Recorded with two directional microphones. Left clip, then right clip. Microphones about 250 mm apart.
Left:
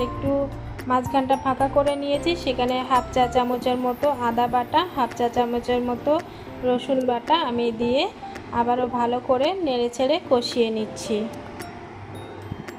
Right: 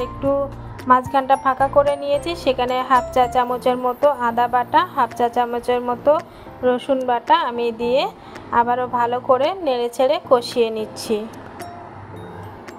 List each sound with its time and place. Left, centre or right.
0.8 s music: centre